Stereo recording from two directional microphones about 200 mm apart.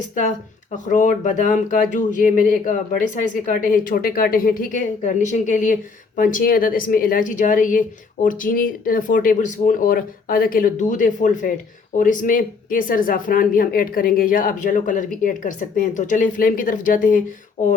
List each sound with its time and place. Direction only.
0.1 s speech: 40° left (ahead or behind)